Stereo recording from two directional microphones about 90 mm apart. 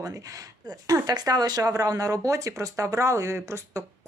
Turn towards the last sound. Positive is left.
turn(degrees=-35)  # may be behind; listen again after turning